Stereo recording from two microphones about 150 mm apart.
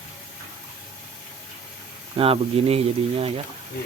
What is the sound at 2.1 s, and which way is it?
Speech, 40° right (ahead or behind).